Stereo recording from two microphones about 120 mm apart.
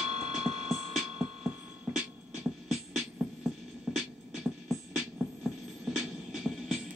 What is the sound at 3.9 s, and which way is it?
Music, 5° right (ahead or behind).